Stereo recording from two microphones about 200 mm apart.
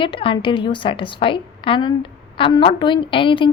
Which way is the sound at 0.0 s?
25° left (ahead or behind).